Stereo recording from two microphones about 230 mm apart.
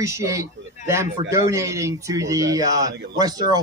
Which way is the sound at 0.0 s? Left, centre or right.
Centre.